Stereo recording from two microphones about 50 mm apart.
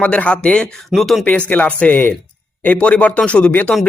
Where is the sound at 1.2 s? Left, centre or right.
Left.